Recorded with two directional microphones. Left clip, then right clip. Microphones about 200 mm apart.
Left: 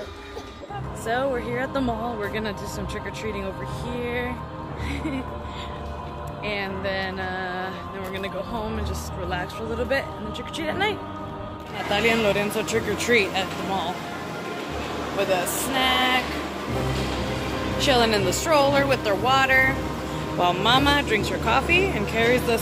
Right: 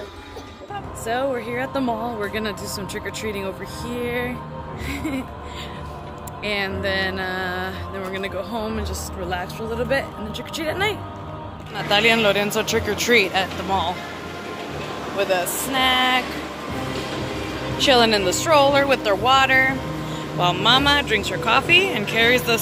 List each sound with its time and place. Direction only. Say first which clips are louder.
1.0 s speech: right 1 dB; 20° right (ahead or behind)
3.9 s speech: right 3 dB; 25° right (ahead or behind)
6.4 s music: right 4 dB; 30° right (ahead or behind)
9.3 s speech: right 2 dB; 25° right (ahead or behind)
11.9 s speech: right 4 dB; 10° right (ahead or behind)
15.1 s speech: right 3 dB; 15° right (ahead or behind)
15.7 s speech: right 3 dB; 25° right (ahead or behind)
17.7 s speech: right 4 dB; 30° right (ahead or behind); by 19.7 s 5° right (ahead or behind)
20.3 s speech: right 2 dB; 5° left (ahead or behind)